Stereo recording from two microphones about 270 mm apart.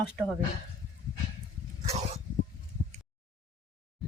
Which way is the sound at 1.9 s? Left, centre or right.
Right.